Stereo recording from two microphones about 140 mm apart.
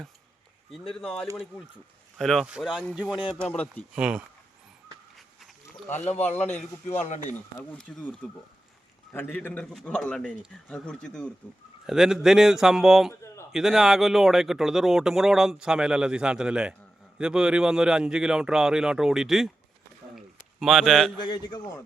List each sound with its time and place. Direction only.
2.1 s speech: centre (ahead or behind)
3.4 s a man's voice: 10° left (ahead or behind)
3.9 s speech: 5° right (ahead or behind)
5.1 s goat: centre (ahead or behind)
6.1 s a man's voice: 10° left (ahead or behind)
6.4 s a man's voice: 50° left (ahead or behind)
7.6 s a man's voice: 10° left (ahead or behind)
20.1 s a sound: centre (ahead or behind)
21.2 s a man's voice: 30° left (ahead or behind)